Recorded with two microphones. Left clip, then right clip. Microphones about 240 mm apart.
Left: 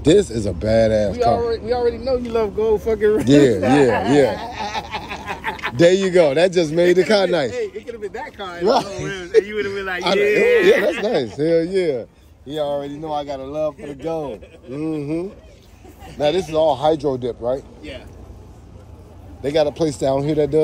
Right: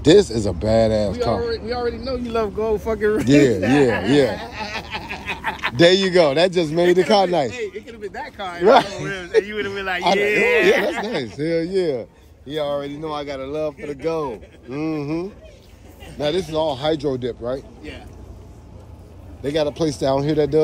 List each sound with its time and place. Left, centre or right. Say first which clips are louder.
0.0 s a man's voice: right 1 dB; centre
4.8 s a sound: left 1 dB; right
5.1 s a man's voice: right 2 dB; centre
19.4 s a man's voice: left 3 dB; centre